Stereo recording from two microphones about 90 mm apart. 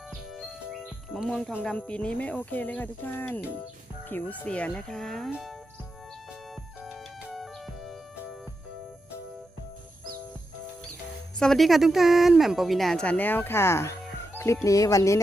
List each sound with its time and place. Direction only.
1.3 s speech: 5° left (ahead or behind)
11.3 s speech: 5° left (ahead or behind)
13.1 s speech: 20° left (ahead or behind); by 15.2 s 35° left (ahead or behind)